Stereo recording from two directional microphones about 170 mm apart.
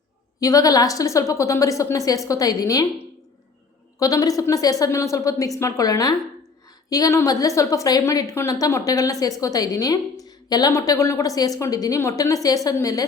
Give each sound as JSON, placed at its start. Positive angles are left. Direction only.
{"t": 0.3, "sound": "a woman's voice", "side_deg": 20}
{"t": 4.0, "sound": "a woman's voice", "side_deg": 20}